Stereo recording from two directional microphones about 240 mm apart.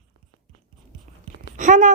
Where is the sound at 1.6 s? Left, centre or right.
Right.